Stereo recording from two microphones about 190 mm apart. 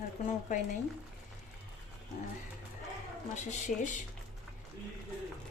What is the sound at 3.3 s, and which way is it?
Speech, 40° left (ahead or behind).